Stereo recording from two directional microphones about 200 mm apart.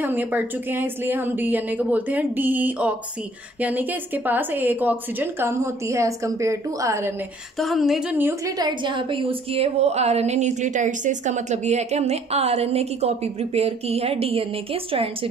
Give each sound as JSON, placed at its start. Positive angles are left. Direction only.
{"t": 0.0, "sound": "speech", "side_deg": -10}
{"t": 7.5, "sound": "a woman's voice", "side_deg": 0}